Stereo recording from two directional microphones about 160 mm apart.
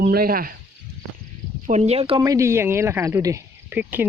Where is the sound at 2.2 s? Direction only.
20° right (ahead or behind).